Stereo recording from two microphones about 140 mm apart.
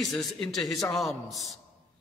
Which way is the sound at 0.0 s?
Centre (ahead or behind).